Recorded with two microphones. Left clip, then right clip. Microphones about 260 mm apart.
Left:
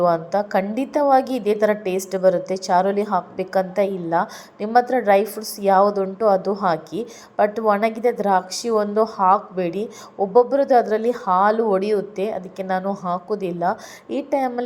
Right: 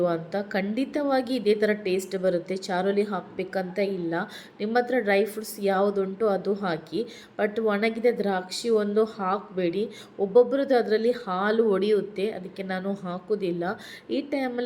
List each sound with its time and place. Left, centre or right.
0.0 s a woman's voice: centre